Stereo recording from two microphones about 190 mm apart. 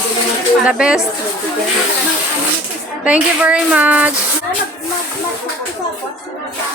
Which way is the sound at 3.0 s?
5° right (ahead or behind).